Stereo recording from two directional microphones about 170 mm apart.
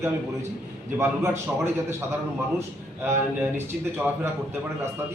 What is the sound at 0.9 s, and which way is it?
Speech, 15° right (ahead or behind).